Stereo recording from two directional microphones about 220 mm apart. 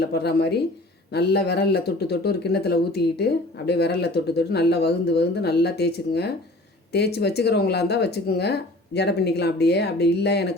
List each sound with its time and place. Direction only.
0.0 s a man's voice: 45° left (ahead or behind)